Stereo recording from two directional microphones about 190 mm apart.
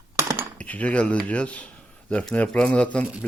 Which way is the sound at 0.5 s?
10° left (ahead or behind).